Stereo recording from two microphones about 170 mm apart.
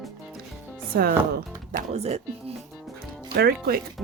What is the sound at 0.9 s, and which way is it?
Speech, 60° right (ahead or behind).